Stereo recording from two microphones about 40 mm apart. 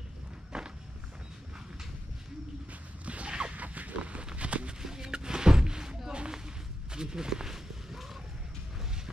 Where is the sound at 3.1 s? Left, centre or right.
Right.